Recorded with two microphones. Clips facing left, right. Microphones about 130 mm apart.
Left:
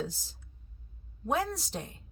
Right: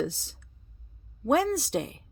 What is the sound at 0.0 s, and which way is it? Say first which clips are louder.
A woman's voice: right 6 dB; 75° right (ahead or behind).